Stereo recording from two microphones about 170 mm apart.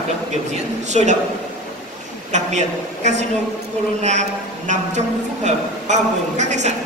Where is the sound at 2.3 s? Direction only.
45° right (ahead or behind).